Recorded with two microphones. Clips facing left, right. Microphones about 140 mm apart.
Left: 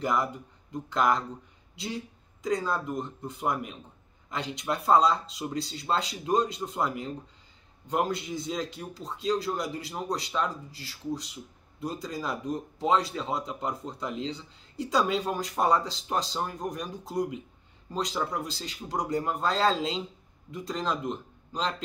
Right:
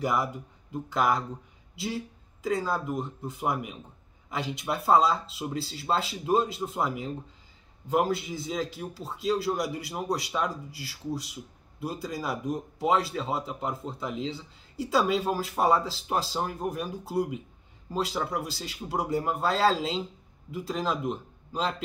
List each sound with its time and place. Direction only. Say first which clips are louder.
0.0 s a man's voice: even; 5° right (ahead or behind)